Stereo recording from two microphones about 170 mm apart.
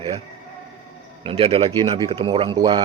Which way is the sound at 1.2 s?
35° right (ahead or behind).